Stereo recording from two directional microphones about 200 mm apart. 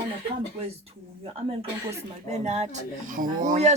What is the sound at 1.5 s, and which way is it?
Speech, 35° right (ahead or behind).